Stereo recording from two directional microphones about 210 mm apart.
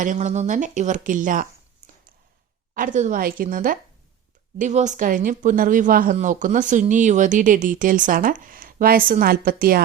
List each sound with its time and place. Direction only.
0.0 s speech: 35° right (ahead or behind)
2.7 s speech: 40° right (ahead or behind)